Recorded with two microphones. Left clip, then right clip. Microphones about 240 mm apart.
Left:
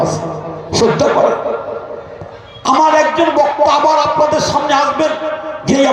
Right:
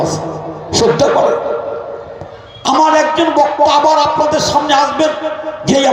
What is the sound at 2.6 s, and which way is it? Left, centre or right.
A man's voice, right.